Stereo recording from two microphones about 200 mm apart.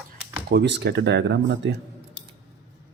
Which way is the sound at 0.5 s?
60° right (ahead or behind).